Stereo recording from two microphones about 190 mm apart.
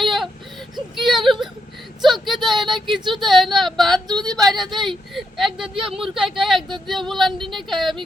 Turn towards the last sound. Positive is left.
turn(degrees=0)  # may be behind; listen again after turning